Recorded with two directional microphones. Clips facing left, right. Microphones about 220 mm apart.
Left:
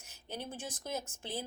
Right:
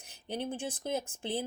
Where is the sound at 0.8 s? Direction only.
20° right (ahead or behind).